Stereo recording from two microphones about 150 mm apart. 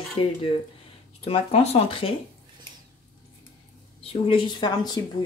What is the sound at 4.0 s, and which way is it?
Speech, 35° left (ahead or behind).